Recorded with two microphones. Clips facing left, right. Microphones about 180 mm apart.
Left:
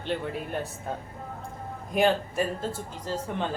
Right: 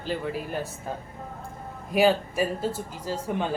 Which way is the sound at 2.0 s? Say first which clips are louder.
Right 2 dB; 5° right (ahead or behind).